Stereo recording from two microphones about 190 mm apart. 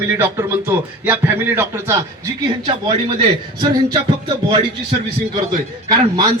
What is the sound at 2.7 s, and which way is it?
Speech, 25° right (ahead or behind).